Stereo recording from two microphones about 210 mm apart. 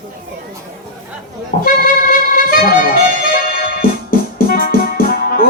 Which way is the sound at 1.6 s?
40° left (ahead or behind).